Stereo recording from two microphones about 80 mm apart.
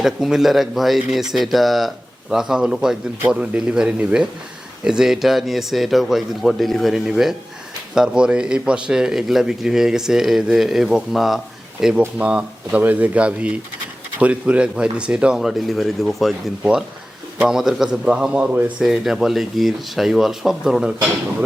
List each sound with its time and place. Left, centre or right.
0.0 s speech: centre
15.4 s speech: centre
17.3 s speech: centre
18.8 s speech: centre